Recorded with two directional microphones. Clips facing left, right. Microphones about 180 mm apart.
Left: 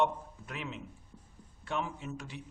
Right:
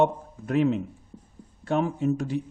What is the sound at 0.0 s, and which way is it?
A man's voice, 40° right (ahead or behind).